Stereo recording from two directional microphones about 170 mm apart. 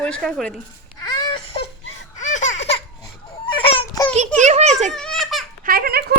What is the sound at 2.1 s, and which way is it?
Baby laughter, 45° left (ahead or behind).